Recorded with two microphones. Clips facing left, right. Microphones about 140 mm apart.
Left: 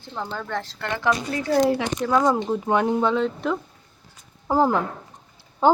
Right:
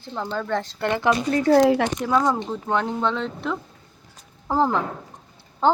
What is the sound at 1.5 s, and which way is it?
Speech, 75° right (ahead or behind).